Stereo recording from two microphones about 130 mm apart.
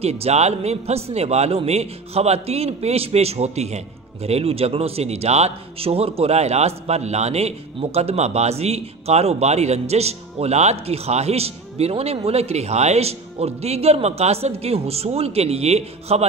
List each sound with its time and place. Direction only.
0.0 s a man's voice: 55° right (ahead or behind)